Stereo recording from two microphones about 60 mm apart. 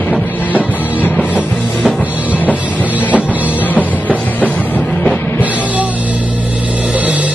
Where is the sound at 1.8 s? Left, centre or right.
Centre.